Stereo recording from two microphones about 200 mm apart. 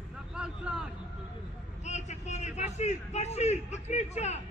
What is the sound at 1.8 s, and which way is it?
A man's voice, 35° left (ahead or behind).